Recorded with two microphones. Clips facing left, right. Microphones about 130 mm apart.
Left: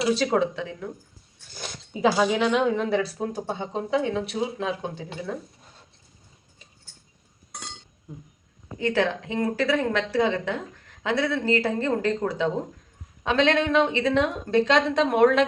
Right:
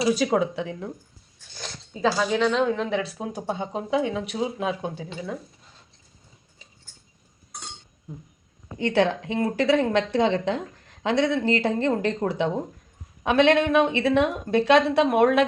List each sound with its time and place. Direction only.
0.2 s a woman's voice: 10° right (ahead or behind)
1.5 s speech: 10° left (ahead or behind)
3.2 s a woman's voice: 5° right (ahead or behind)
8.8 s a woman's voice: 20° right (ahead or behind)